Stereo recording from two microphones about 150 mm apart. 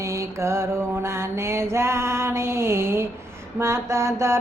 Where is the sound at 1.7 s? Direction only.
15° right (ahead or behind).